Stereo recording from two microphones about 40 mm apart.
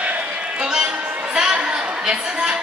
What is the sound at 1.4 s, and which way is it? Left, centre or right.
Chatter, centre.